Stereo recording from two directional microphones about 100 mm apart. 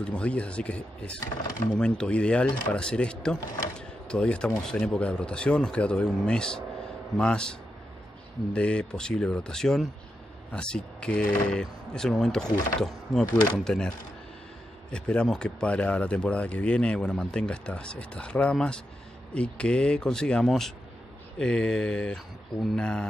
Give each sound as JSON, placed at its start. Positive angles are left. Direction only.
{"t": 0.0, "sound": "speech", "side_deg": 10}
{"t": 8.5, "sound": "speech", "side_deg": 10}